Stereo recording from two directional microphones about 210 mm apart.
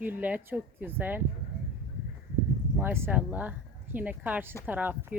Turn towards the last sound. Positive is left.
turn(degrees=-10)  # may be behind; listen again after turning